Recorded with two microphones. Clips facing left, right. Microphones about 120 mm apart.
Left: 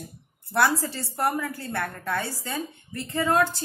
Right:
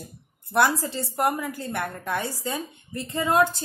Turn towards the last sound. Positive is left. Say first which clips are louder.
# right 1 dB
turn(degrees=-20)  # may be behind; listen again after turning